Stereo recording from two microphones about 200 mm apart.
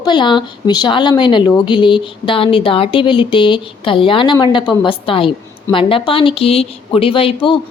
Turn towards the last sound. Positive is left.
turn(degrees=25)  # may be behind; listen again after turning